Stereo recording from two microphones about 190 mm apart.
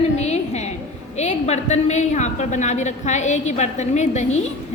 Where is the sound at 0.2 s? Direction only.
35° left (ahead or behind).